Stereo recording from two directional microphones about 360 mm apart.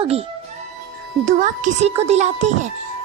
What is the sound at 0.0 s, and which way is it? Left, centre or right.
A child's voice, centre.